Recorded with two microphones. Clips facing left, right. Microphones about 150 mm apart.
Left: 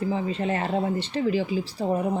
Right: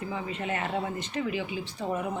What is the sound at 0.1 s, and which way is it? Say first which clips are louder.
Speech: left 6 dB; 30° left (ahead or behind).